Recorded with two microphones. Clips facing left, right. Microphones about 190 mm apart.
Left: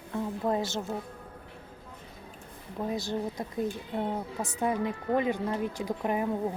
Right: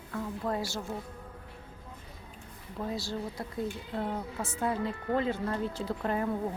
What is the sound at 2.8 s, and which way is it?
Speech, 20° left (ahead or behind).